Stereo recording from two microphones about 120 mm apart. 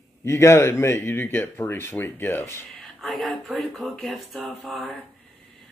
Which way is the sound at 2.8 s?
Centre (ahead or behind).